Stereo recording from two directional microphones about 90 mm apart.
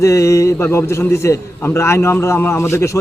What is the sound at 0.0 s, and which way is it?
Speech, 35° left (ahead or behind).